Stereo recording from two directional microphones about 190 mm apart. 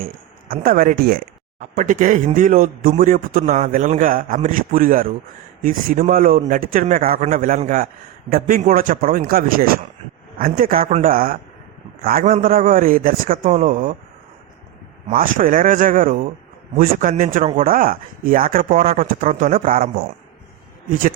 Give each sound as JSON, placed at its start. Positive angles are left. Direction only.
{"t": 0.0, "sound": "speech", "side_deg": -50}
{"t": 15.1, "sound": "speech", "side_deg": -45}